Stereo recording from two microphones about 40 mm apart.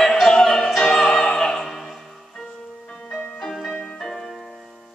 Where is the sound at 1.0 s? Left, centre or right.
Centre.